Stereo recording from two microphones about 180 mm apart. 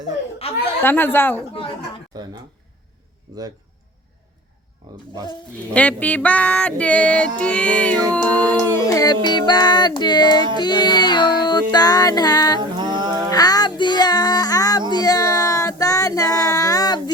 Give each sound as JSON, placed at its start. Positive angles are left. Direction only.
{"t": 0.4, "sound": "speech", "side_deg": 35}
{"t": 0.8, "sound": "female singing", "side_deg": 10}
{"t": 3.3, "sound": "a man's voice", "side_deg": -20}
{"t": 5.7, "sound": "female singing", "side_deg": 10}
{"t": 8.1, "sound": "a sound", "side_deg": 10}
{"t": 12.5, "sound": "mantra", "side_deg": -25}
{"t": 13.3, "sound": "child singing", "side_deg": 20}